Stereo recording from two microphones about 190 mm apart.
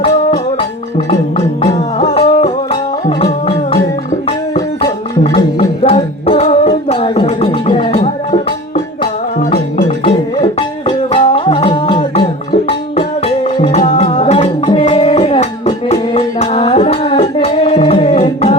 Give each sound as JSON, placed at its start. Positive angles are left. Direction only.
{"t": 1.6, "sound": "music", "side_deg": 35}
{"t": 10.0, "sound": "music", "side_deg": 30}